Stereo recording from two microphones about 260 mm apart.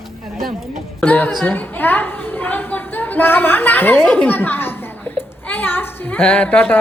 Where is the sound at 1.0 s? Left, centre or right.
Centre.